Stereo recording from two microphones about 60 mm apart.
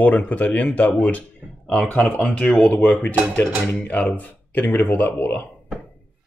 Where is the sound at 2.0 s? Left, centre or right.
Centre; by 5.4 s left.